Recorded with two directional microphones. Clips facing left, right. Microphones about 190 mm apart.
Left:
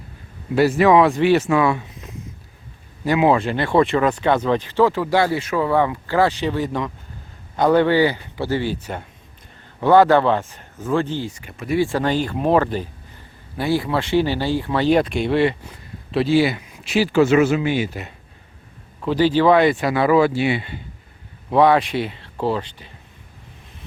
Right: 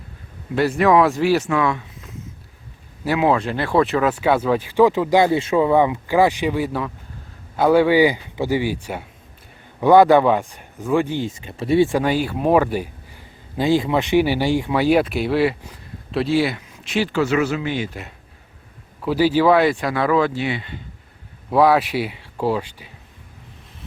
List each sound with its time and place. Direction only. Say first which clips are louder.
0.5 s speech: left 2 dB; 5° left (ahead or behind)
1.5 s speech: left 2 dB; 10° left (ahead or behind)
3.0 s speech: left 2 dB; centre (ahead or behind)
11.3 s speech: right 4 dB; 25° right (ahead or behind)
11.9 s speech: right 1 dB; 10° right (ahead or behind); by 17.2 s 5° left (ahead or behind)
17.2 s speech: left 6 dB; 20° left (ahead or behind); by 18.1 s 5° left (ahead or behind)
19.0 s speech: even; 10° right (ahead or behind); by 20.7 s 10° left (ahead or behind)
21.5 s speech: even; 5° right (ahead or behind)